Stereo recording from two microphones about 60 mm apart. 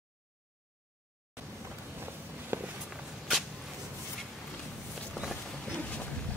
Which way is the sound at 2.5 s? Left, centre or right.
Right.